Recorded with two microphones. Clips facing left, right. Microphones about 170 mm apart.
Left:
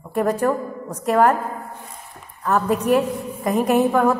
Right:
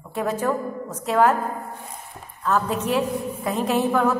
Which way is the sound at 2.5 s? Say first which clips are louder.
Left 4 dB; 15° left (ahead or behind).